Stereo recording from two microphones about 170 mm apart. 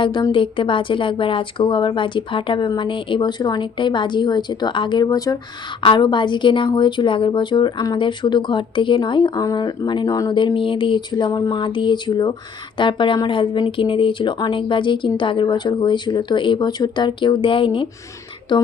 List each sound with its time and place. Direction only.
0.0 s a woman's voice: 30° left (ahead or behind)